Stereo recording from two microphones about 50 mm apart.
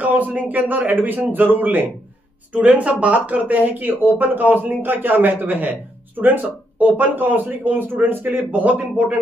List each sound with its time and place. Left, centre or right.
0.0 s speech: right
2.5 s speech: right